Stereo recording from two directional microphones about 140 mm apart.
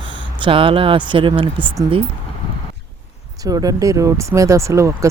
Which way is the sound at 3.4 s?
25° right (ahead or behind).